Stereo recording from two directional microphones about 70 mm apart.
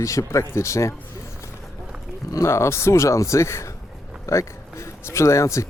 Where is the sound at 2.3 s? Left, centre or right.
Left.